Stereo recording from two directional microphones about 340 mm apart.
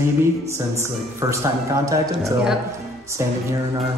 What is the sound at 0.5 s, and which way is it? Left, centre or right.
Speech, centre.